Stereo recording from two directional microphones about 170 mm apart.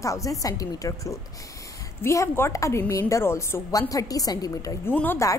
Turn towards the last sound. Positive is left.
turn(degrees=15)  # may be behind; listen again after turning